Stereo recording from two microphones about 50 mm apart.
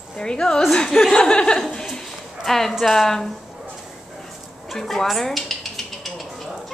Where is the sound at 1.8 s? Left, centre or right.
Centre.